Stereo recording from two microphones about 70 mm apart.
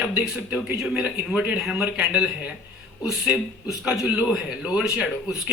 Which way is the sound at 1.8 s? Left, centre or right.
Centre.